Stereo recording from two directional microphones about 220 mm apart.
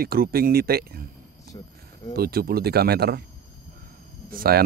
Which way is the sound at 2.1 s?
45° right (ahead or behind).